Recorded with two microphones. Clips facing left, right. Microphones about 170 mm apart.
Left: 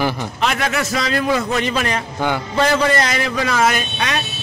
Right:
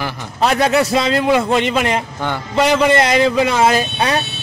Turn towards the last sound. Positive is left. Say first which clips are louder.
# right 5 dB
turn(degrees=-30)  # may be behind; listen again after turning